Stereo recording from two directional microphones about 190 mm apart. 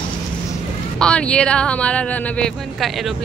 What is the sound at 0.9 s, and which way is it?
Speech, 5° left (ahead or behind).